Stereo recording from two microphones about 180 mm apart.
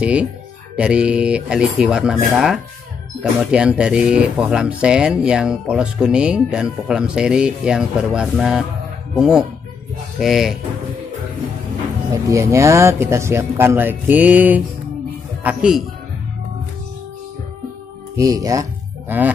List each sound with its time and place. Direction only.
0.0 s speech: 5° right (ahead or behind)
12.1 s speech: 15° right (ahead or behind)
18.1 s speech: 20° right (ahead or behind)